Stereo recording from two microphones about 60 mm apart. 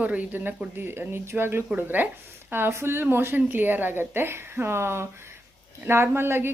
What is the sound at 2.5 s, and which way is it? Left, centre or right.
Speech, right.